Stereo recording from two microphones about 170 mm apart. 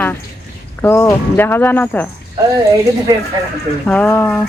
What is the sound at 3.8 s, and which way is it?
Speech, 10° left (ahead or behind).